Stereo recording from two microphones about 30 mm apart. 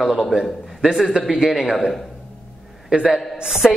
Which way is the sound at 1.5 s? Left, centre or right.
Centre.